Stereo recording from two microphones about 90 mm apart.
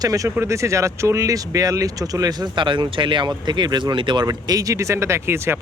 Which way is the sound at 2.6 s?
65° right (ahead or behind).